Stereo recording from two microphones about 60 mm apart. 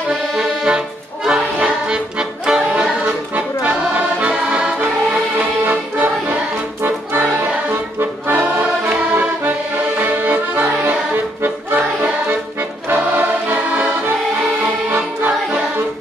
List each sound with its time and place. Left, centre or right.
0.4 s music: centre
5.7 s music: right
8.0 s music: right
9.9 s accordion: right